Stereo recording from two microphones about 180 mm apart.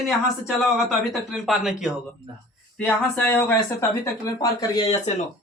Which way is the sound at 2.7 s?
10° left (ahead or behind).